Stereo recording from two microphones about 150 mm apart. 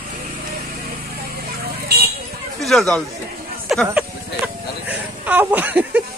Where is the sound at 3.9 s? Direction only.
10° right (ahead or behind).